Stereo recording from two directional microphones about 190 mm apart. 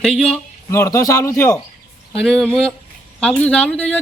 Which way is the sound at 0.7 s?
15° left (ahead or behind).